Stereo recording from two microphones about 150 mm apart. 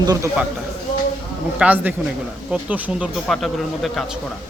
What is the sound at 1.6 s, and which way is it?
Speech, 10° right (ahead or behind).